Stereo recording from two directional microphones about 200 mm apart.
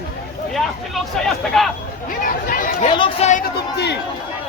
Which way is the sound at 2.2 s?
45° left (ahead or behind).